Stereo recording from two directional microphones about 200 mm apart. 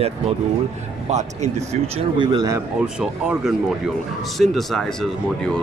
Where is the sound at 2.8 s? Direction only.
5° right (ahead or behind).